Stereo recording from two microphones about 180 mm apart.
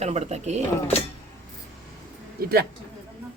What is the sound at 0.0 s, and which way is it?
Speech, 35° right (ahead or behind).